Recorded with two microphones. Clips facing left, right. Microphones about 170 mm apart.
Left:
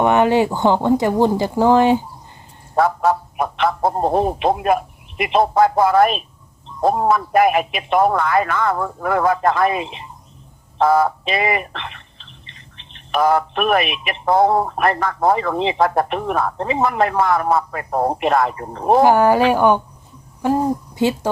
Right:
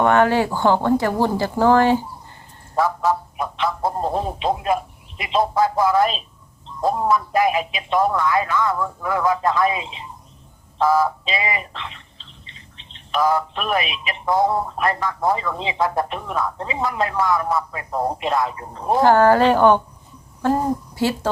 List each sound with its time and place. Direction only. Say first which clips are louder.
0.0 s speech: left 2 dB; 20° left (ahead or behind)
2.7 s a man's voice: left 3 dB; 60° left (ahead or behind)
19.0 s speech: right 2 dB; 15° left (ahead or behind)